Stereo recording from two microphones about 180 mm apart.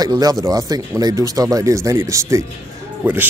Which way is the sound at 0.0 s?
20° right (ahead or behind).